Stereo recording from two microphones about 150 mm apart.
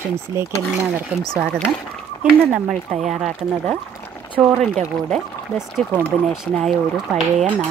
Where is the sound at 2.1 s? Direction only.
25° left (ahead or behind).